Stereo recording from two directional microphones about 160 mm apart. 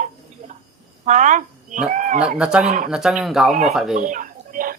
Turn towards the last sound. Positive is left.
turn(degrees=-60)  # may be behind; listen again after turning